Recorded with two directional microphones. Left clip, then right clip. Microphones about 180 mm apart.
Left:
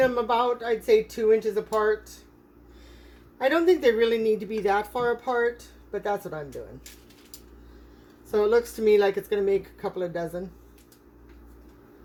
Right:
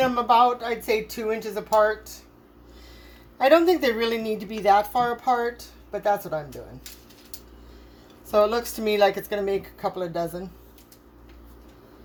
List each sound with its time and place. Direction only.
0.0 s a woman's voice: 45° right (ahead or behind)
3.3 s a woman's voice: 45° right (ahead or behind)
8.3 s a woman's voice: 45° right (ahead or behind)